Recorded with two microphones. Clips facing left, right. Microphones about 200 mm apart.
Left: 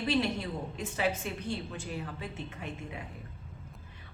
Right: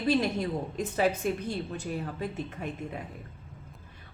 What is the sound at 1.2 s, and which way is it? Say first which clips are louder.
Speech: right 8 dB; 45° right (ahead or behind).